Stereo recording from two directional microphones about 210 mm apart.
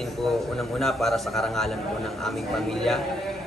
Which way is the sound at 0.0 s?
Centre (ahead or behind).